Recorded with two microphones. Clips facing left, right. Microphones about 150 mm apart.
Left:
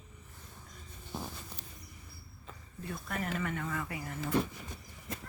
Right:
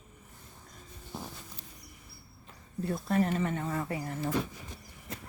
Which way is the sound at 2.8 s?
35° right (ahead or behind).